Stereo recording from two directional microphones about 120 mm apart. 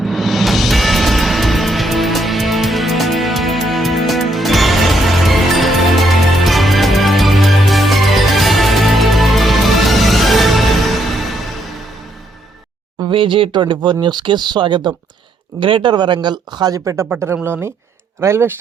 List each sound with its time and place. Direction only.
0.0 s music: centre (ahead or behind)
13.0 s speech: 45° right (ahead or behind); by 18.5 s 20° right (ahead or behind)